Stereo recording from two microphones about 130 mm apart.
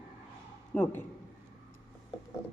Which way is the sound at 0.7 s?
10° left (ahead or behind).